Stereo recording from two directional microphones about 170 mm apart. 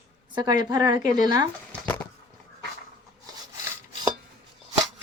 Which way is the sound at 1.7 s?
10° left (ahead or behind).